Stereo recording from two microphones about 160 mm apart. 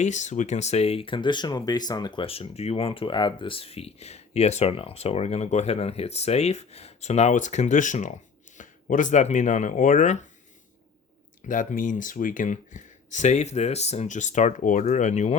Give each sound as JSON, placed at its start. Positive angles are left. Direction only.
{"t": 0.0, "sound": "speech", "side_deg": 50}
{"t": 11.4, "sound": "speech", "side_deg": 55}